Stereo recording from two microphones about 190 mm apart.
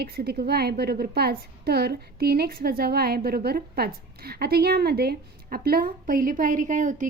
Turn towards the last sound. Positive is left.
turn(degrees=-40)  # may be behind; listen again after turning